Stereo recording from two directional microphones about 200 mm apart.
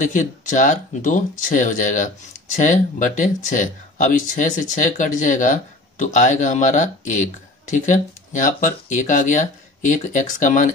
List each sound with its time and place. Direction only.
0.0 s speech: 40° left (ahead or behind)